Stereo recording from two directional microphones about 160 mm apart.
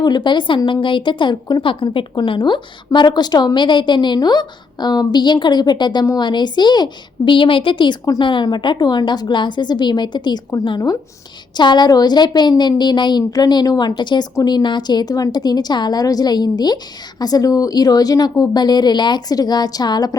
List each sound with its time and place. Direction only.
0.0 s a woman's voice: 25° left (ahead or behind)